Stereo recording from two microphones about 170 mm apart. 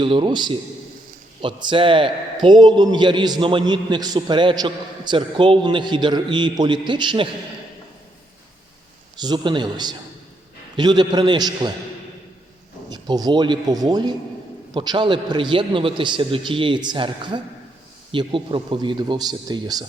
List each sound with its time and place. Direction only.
0.0 s a man's voice: 30° right (ahead or behind)
9.1 s a man's voice: 25° right (ahead or behind)
12.9 s a man's voice: 25° right (ahead or behind)